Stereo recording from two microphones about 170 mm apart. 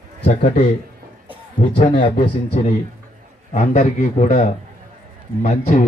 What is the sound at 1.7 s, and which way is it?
A man's voice, 45° left (ahead or behind).